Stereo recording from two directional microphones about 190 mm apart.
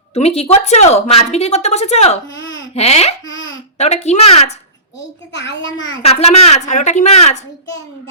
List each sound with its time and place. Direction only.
0.1 s speech: 35° left (ahead or behind)
5.3 s a child's voice: 70° left (ahead or behind)
6.0 s speech: 35° left (ahead or behind)